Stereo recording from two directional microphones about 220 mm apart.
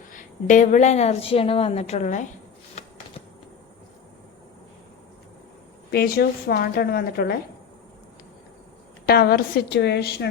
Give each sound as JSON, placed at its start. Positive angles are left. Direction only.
{"t": 0.1, "sound": "a woman's voice", "side_deg": 35}
{"t": 5.9, "sound": "a woman's voice", "side_deg": 45}
{"t": 9.0, "sound": "a woman's voice", "side_deg": 45}